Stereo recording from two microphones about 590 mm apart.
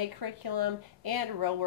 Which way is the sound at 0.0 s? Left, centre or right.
Right.